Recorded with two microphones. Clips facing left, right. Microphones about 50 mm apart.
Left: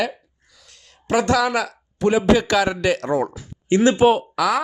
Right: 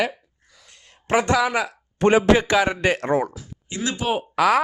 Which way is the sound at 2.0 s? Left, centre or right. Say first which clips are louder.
Right 2 dB; right.